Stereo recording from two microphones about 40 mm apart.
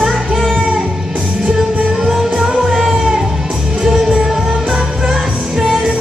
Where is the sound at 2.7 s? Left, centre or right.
Centre.